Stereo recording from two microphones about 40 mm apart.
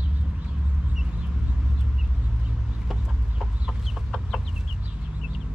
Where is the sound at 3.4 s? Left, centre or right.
Centre.